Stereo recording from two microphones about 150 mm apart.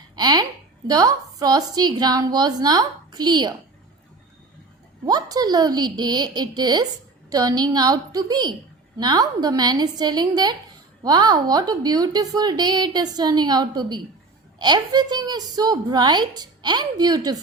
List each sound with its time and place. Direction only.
0.2 s a woman's voice: 25° right (ahead or behind)
5.0 s a woman's voice: 25° right (ahead or behind)